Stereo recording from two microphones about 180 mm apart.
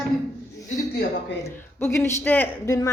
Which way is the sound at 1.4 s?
15° left (ahead or behind).